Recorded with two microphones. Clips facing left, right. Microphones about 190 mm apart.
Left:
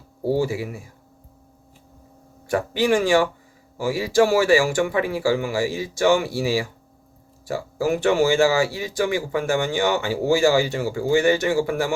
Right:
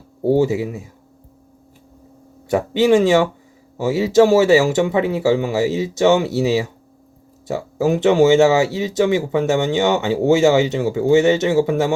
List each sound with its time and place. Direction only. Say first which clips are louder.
0.2 s speech: right 6 dB; 20° right (ahead or behind)
2.5 s speech: right 6 dB; 20° right (ahead or behind)